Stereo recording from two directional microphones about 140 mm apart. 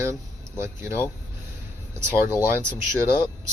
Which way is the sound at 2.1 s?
15° right (ahead or behind).